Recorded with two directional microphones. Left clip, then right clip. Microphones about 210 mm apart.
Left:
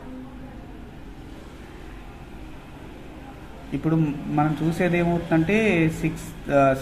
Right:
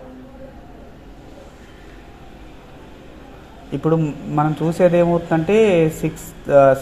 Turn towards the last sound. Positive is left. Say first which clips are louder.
# right 7 dB
turn(degrees=-25)  # may be behind; listen again after turning